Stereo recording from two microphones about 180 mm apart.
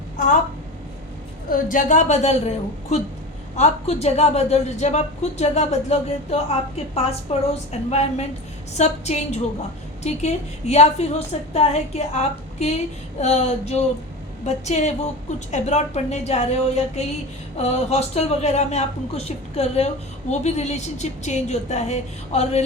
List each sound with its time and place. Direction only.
1.5 s a woman's voice: 50° left (ahead or behind)